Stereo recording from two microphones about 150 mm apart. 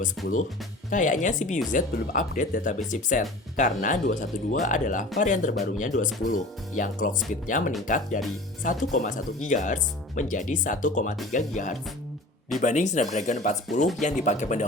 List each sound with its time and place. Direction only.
0.2 s speech: centre (ahead or behind)
0.9 s speech: 60° left (ahead or behind)